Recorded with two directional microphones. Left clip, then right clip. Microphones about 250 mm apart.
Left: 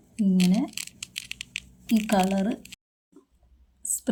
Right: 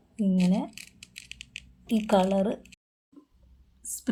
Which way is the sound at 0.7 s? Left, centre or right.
Left.